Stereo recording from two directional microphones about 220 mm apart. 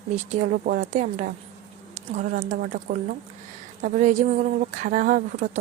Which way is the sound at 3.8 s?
35° right (ahead or behind).